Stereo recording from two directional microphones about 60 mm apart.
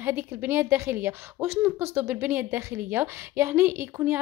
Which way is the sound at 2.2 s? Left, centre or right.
Right.